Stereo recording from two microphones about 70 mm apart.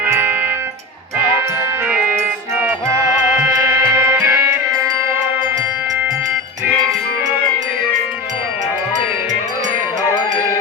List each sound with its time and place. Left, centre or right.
3.3 s music: right